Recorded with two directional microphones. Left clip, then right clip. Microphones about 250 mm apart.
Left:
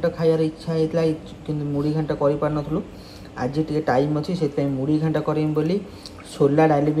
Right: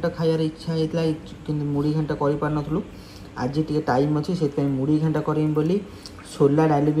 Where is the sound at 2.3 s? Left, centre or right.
Centre.